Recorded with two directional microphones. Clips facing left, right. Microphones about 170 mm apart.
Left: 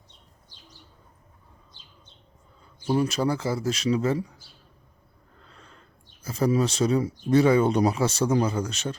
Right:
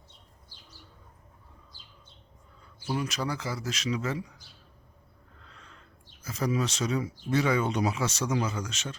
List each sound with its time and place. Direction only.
2.9 s speech: 30° left (ahead or behind)
5.4 s a sound: 40° left (ahead or behind)
6.2 s speech: 30° left (ahead or behind)